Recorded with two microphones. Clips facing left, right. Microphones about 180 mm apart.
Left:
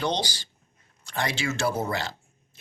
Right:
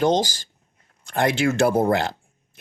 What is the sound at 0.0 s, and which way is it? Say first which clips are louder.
Speech: right 8 dB; 45° right (ahead or behind).